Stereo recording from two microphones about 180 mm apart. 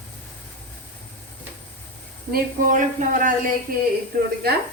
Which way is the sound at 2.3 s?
50° right (ahead or behind).